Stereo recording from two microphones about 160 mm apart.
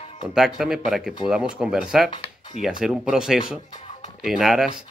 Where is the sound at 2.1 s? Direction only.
35° left (ahead or behind).